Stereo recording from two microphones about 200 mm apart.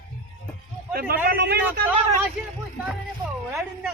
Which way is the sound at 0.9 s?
50° right (ahead or behind).